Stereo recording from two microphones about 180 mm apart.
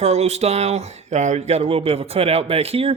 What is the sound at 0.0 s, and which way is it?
Speech, 35° right (ahead or behind).